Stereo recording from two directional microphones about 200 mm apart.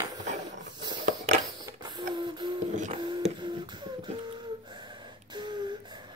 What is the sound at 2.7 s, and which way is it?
Music, 35° right (ahead or behind).